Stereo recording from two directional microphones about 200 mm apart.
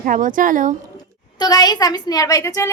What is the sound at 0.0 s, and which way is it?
Speech, 40° right (ahead or behind).